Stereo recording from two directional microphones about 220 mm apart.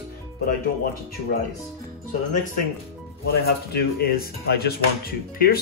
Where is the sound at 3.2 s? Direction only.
45° left (ahead or behind).